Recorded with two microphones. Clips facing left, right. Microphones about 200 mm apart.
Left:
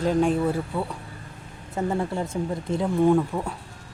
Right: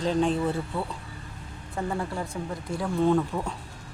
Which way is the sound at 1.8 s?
25° left (ahead or behind).